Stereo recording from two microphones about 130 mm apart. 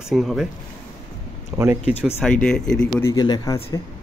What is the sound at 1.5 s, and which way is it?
Speech, 20° right (ahead or behind).